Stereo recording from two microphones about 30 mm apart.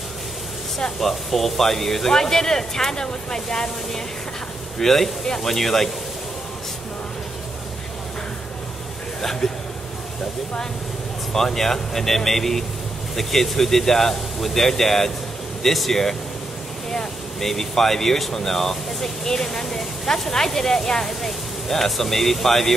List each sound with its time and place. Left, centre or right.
0.9 s speech: centre
4.7 s speech: centre
9.2 s speech: centre
11.3 s speech: centre
16.9 s a sound: centre
17.5 s speech: centre